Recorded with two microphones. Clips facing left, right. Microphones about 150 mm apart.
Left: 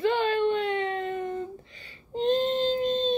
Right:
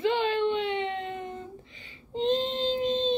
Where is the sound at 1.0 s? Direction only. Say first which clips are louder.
Left 5 dB; 20° right (ahead or behind).